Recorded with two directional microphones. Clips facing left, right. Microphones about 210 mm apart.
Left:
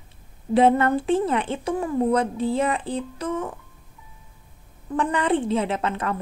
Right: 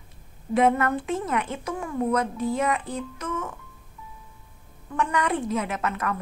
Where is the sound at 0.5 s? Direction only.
30° left (ahead or behind).